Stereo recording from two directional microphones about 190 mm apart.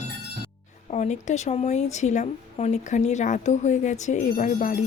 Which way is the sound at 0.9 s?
40° left (ahead or behind).